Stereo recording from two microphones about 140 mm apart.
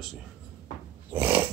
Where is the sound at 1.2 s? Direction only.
15° right (ahead or behind).